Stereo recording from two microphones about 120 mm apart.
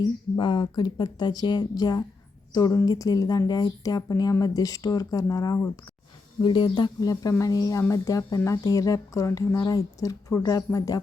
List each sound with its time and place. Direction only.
0.0 s a woman's voice: 40° left (ahead or behind)